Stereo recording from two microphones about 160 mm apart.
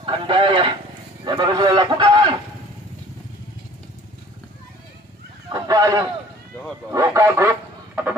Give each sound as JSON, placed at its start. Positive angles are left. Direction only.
{"t": 0.0, "sound": "a man's voice", "side_deg": -30}
{"t": 5.5, "sound": "a sound", "side_deg": -20}
{"t": 6.9, "sound": "speech", "side_deg": -20}